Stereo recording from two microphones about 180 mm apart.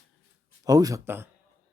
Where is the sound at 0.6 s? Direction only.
20° right (ahead or behind).